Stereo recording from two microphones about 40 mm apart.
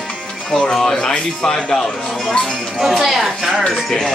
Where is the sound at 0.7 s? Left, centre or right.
Centre.